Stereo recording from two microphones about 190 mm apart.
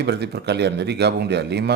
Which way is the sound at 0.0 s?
60° right (ahead or behind).